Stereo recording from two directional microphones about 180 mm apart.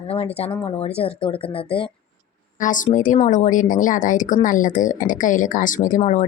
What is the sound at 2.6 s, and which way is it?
Speech, 45° left (ahead or behind).